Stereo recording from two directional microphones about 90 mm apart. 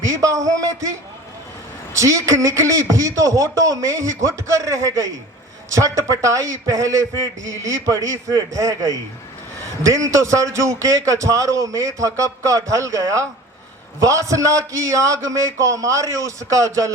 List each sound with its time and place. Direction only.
0.0 s a man's voice: 35° right (ahead or behind)
2.0 s a man's voice: 35° right (ahead or behind)